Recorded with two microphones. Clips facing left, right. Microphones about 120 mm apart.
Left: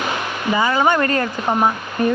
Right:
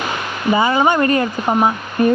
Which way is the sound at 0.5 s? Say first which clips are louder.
Right 2 dB; 20° right (ahead or behind).